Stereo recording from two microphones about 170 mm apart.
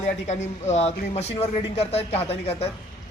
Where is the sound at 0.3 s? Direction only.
40° left (ahead or behind).